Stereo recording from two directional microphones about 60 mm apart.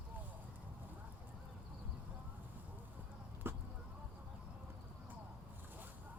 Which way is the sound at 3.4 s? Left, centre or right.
Right.